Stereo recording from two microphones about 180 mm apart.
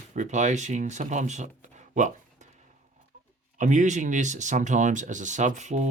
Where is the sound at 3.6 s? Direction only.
45° right (ahead or behind).